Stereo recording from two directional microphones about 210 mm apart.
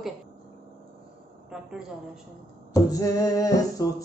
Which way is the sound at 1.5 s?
5° right (ahead or behind).